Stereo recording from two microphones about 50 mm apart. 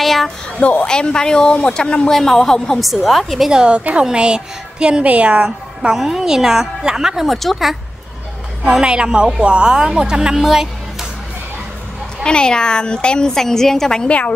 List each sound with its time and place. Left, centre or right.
0.0 s a sound: centre
0.6 s a woman's voice: left
2.8 s a woman's voice: centre
3.4 s speech: centre
5.9 s a woman's voice: centre
7.2 s a woman's voice: centre
8.6 s a woman's voice: centre
12.2 s a woman's voice: centre
14.0 s a woman's voice: left